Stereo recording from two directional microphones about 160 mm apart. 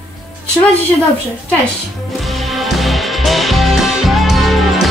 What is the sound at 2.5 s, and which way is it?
Music, centre (ahead or behind).